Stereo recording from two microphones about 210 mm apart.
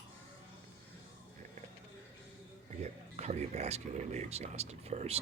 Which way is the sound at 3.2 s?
30° right (ahead or behind).